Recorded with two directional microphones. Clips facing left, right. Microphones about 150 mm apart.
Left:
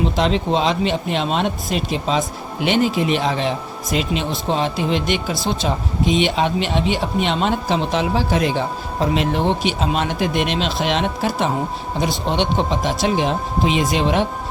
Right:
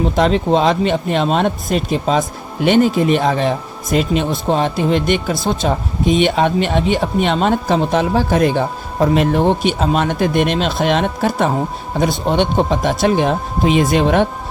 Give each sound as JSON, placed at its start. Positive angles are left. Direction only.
{"t": 0.2, "sound": "speech", "side_deg": -50}